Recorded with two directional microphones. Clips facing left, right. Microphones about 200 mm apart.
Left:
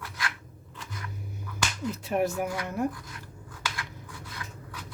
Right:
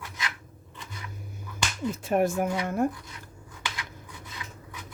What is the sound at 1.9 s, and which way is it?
Speech, 50° right (ahead or behind).